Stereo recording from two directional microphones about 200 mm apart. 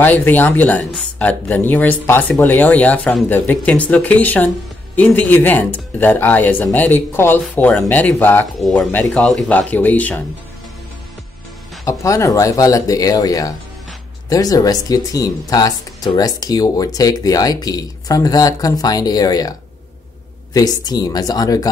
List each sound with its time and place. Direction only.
0.0 s speech: 10° left (ahead or behind)
11.8 s speech: 15° left (ahead or behind)
20.5 s speech: 20° left (ahead or behind)